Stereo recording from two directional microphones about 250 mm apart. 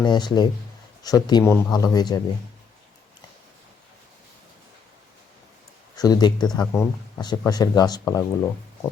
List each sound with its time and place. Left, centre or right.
0.0 s speech: centre
6.0 s speech: centre